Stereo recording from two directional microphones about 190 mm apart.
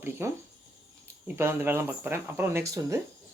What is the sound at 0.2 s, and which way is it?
Speech, 15° right (ahead or behind).